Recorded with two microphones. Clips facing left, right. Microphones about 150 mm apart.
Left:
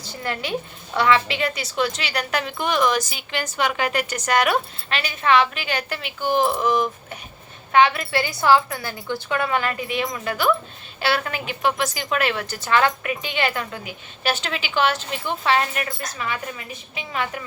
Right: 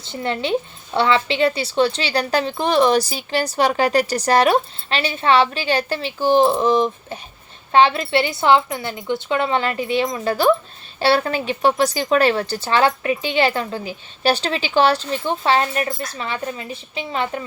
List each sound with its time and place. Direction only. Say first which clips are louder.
0.0 s a woman's voice: right 5 dB; 25° right (ahead or behind)